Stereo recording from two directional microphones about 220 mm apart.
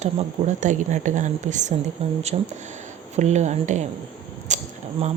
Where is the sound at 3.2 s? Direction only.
30° right (ahead or behind).